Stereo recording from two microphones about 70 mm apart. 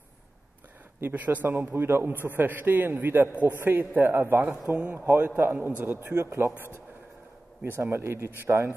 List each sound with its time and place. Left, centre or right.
1.0 s a man's voice: right
4.6 s a man's voice: centre; by 6.5 s right
7.6 s speech: right